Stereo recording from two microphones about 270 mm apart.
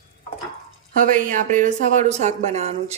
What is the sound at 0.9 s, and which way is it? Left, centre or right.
A woman's voice, right.